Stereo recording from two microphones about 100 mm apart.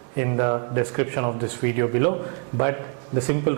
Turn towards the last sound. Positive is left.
turn(degrees=-15)  # may be behind; listen again after turning